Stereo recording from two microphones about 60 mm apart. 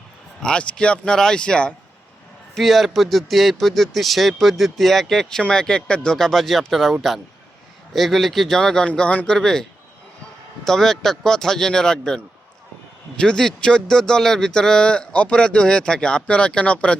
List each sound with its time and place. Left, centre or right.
0.4 s speech: centre
2.6 s speech: centre
8.9 s speech: left
10.7 s speech: centre